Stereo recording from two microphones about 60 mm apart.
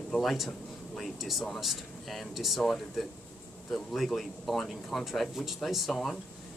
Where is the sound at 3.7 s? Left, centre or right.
Centre.